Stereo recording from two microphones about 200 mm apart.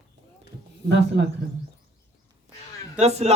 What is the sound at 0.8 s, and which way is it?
Speech, 60° right (ahead or behind).